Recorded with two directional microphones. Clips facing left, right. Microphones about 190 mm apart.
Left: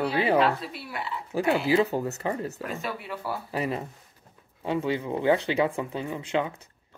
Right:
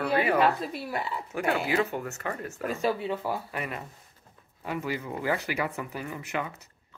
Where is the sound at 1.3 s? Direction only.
30° left (ahead or behind).